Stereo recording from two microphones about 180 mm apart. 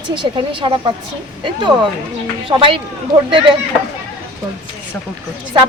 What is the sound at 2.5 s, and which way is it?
Speech, 30° right (ahead or behind).